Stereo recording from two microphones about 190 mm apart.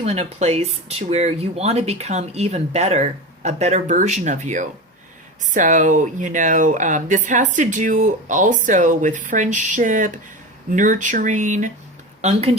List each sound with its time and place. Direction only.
0.0 s speech: 35° right (ahead or behind)